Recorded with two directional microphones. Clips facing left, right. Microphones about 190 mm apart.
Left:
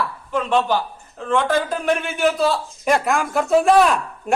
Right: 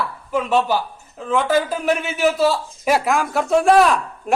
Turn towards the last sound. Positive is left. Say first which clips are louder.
# right 1 dB
turn(degrees=0)  # may be behind; listen again after turning